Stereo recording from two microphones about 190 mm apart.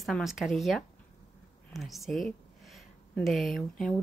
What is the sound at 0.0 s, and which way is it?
Speech, centre (ahead or behind).